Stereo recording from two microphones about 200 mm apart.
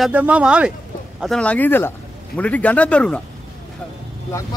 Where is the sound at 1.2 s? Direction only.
5° left (ahead or behind).